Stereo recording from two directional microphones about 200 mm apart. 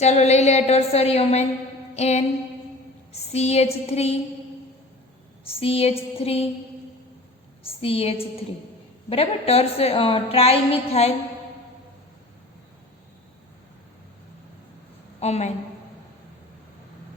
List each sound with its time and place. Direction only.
0.0 s a woman's voice: 35° left (ahead or behind)
5.5 s a woman's voice: 30° left (ahead or behind)
7.6 s a woman's voice: 30° left (ahead or behind)
15.2 s a woman's voice: 35° left (ahead or behind)